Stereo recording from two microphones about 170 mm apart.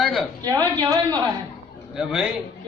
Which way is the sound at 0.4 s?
25° right (ahead or behind).